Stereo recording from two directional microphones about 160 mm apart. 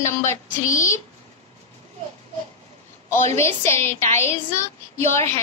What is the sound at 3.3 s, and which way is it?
Speech, 15° left (ahead or behind).